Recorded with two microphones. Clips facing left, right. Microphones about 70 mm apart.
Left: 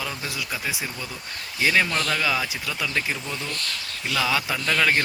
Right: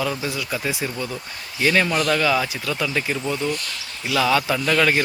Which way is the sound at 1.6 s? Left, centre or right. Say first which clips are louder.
Right 3 dB; centre.